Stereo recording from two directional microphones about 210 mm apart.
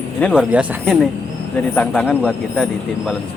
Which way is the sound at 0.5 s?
5° right (ahead or behind).